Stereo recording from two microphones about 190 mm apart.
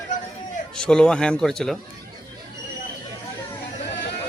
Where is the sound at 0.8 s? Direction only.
5° left (ahead or behind).